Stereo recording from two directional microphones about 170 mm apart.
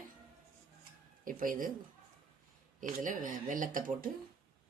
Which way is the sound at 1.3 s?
50° right (ahead or behind).